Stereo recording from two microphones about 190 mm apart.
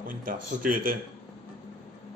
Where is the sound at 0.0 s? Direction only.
45° right (ahead or behind).